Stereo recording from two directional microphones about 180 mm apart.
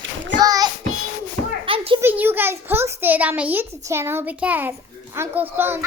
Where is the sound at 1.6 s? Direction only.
30° right (ahead or behind).